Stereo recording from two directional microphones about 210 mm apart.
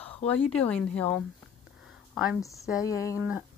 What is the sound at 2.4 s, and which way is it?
Speech, 15° left (ahead or behind).